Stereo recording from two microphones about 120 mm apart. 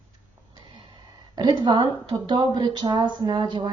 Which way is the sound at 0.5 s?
45° right (ahead or behind).